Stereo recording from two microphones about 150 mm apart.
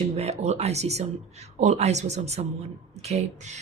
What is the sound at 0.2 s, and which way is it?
Speech, 45° right (ahead or behind).